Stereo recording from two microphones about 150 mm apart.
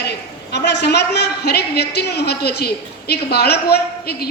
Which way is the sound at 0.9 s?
90° left.